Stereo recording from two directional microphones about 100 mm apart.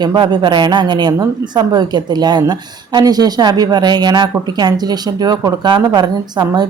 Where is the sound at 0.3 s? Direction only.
50° right (ahead or behind).